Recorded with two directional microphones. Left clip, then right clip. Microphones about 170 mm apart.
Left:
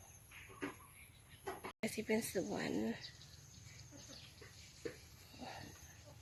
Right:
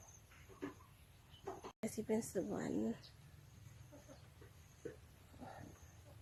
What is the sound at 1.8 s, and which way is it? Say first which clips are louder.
Speech: left 2 dB; centre (ahead or behind).